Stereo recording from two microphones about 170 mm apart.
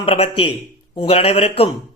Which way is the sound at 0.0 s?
35° left (ahead or behind).